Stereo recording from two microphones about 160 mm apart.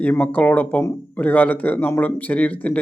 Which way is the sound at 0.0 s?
10° left (ahead or behind).